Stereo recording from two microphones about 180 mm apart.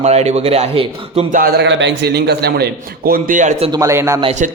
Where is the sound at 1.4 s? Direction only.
60° right (ahead or behind).